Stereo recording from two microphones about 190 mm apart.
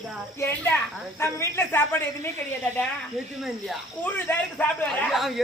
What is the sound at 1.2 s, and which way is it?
A man's voice, 15° left (ahead or behind).